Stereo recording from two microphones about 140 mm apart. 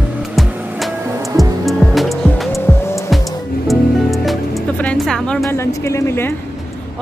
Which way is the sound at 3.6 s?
Centre (ahead or behind).